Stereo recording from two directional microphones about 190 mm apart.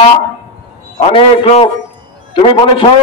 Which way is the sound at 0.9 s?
30° left (ahead or behind).